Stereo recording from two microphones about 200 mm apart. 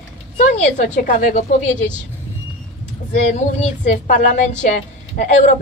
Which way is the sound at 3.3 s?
35° left (ahead or behind).